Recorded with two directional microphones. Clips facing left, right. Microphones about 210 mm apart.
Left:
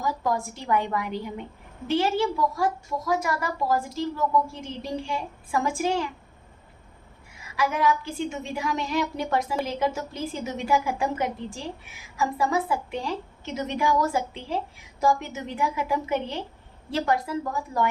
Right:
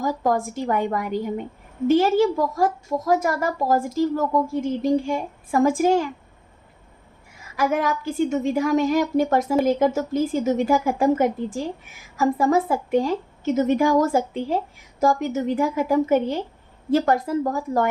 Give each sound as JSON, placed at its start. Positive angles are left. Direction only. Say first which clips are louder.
{"t": 0.0, "sound": "a woman's voice", "louder": "right 5 dB", "side_deg": -45}
{"t": 7.5, "sound": "a woman's voice", "louder": "right 2 dB", "side_deg": -50}